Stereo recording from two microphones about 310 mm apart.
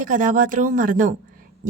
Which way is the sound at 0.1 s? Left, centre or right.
Right.